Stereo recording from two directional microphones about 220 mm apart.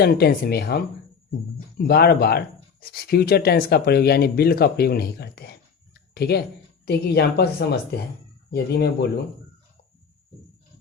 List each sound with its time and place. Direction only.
0.0 s speech: 45° left (ahead or behind)